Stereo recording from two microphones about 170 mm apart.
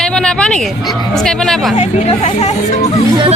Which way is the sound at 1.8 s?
40° left (ahead or behind).